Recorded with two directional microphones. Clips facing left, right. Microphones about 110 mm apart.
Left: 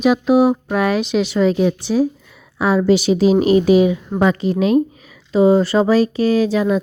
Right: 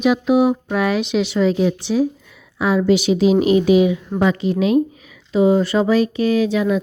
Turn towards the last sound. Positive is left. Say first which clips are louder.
# left 1 dB
turn(degrees=35)  # may be behind; listen again after turning